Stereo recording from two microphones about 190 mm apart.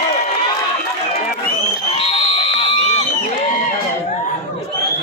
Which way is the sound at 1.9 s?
30° left (ahead or behind).